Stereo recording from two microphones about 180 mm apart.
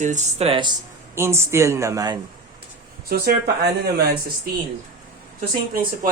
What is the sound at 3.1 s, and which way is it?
Speech, 60° right (ahead or behind).